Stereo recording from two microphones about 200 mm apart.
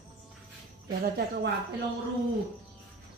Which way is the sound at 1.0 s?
50° right (ahead or behind).